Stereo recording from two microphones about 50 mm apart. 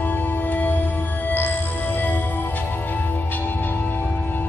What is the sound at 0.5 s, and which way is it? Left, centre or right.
Music, left.